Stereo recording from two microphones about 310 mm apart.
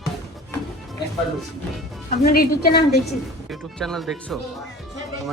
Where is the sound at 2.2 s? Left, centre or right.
Left.